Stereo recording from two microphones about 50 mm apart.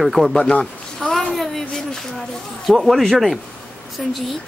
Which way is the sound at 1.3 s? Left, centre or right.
Centre.